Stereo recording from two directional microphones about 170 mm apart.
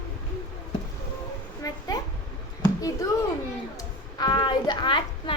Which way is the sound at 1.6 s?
20° left (ahead or behind).